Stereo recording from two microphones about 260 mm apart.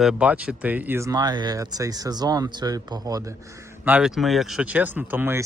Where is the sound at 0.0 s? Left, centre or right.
Centre.